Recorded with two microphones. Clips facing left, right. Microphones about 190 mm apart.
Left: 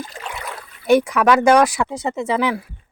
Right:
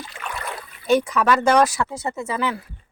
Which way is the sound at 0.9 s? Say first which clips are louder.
Left 4 dB; 10° left (ahead or behind).